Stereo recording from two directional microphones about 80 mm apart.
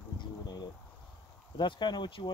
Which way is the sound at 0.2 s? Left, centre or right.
Left.